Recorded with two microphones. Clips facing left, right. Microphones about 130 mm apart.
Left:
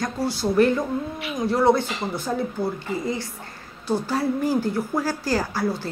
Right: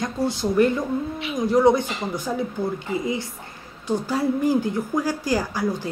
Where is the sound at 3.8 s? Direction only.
15° right (ahead or behind).